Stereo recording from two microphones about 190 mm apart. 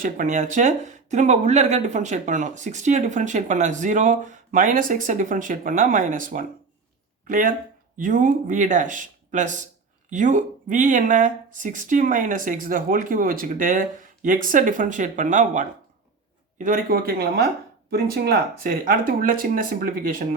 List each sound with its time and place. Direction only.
0.0 s speech: 45° right (ahead or behind)